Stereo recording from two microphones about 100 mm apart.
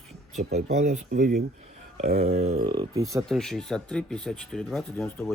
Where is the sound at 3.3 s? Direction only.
5° left (ahead or behind).